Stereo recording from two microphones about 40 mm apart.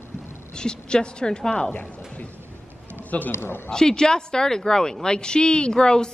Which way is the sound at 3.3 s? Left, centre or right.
Left.